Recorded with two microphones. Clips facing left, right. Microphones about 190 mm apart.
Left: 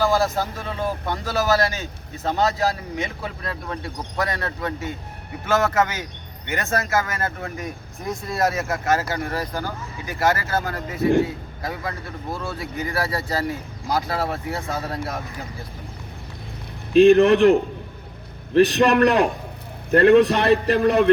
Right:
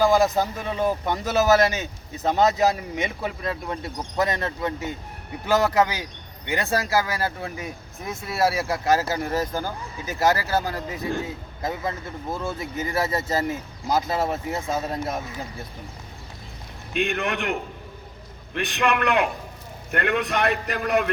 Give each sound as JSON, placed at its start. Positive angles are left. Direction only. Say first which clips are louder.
{"t": 0.0, "sound": "a man's voice", "louder": "right 2 dB", "side_deg": -15}
{"t": 16.9, "sound": "a man's voice", "louder": "left 14 dB", "side_deg": 35}